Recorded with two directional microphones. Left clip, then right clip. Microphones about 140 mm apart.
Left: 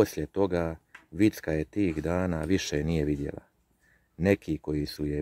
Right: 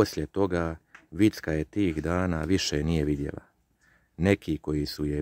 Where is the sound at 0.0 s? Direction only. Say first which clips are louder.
Even; 25° right (ahead or behind).